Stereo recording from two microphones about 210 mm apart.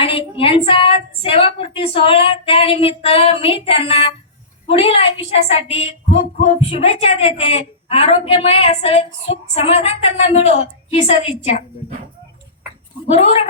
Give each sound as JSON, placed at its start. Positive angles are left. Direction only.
{"t": 0.0, "sound": "a woman's voice", "side_deg": 25}
{"t": 13.1, "sound": "a woman's voice", "side_deg": 30}